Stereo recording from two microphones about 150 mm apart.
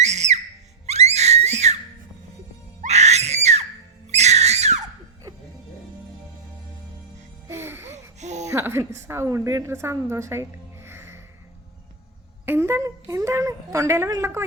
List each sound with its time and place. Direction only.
0.0 s screaming: 50° right (ahead or behind)
2.8 s screaming: 50° right (ahead or behind)
7.4 s music: 15° right (ahead or behind)
8.2 s a sound: 50° right (ahead or behind)
8.4 s a woman's voice: 15° right (ahead or behind)
12.5 s speech: 15° right (ahead or behind)